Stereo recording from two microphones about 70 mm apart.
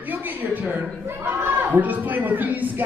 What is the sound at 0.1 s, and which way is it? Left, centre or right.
Speech, right.